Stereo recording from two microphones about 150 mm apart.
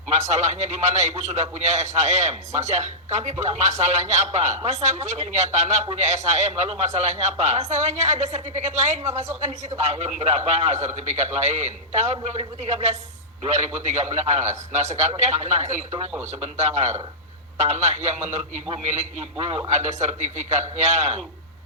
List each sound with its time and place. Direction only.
0.1 s a man's voice: 50° right (ahead or behind)